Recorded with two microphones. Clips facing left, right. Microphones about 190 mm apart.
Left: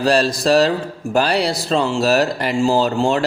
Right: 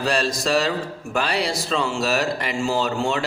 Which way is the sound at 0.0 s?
35° left (ahead or behind).